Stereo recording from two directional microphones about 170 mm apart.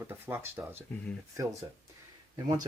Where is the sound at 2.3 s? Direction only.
25° right (ahead or behind).